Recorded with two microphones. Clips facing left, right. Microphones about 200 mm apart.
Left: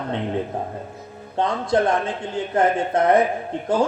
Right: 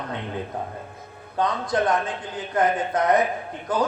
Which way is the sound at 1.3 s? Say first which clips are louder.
Left 3 dB; 25° left (ahead or behind).